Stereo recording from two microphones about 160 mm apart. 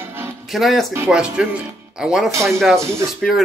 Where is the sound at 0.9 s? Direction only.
10° right (ahead or behind).